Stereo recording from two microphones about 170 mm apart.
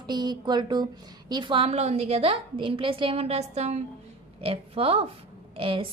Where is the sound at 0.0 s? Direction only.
25° right (ahead or behind).